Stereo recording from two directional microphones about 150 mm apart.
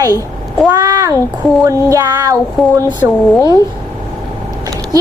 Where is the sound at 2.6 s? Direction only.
Centre (ahead or behind).